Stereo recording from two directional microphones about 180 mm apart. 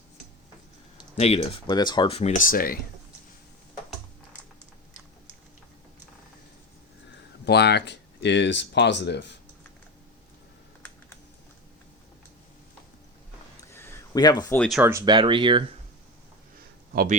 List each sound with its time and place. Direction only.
1.1 s speech: 35° left (ahead or behind); by 2.7 s 50° left (ahead or behind)
7.4 s speech: 65° left (ahead or behind)
13.7 s a sound: 15° left (ahead or behind)
14.5 s speech: 5° left (ahead or behind)
14.8 s speech: 15° right (ahead or behind)
15.0 s speech: 25° right (ahead or behind)
16.9 s speech: 55° right (ahead or behind)